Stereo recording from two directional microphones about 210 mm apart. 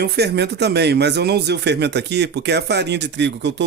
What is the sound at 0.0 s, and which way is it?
A man's voice, 50° right (ahead or behind).